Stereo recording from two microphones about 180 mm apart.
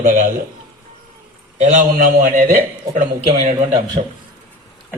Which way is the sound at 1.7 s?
45° right (ahead or behind).